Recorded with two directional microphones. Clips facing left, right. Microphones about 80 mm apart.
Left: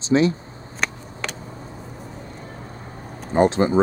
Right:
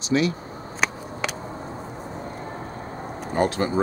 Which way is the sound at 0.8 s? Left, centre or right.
Centre.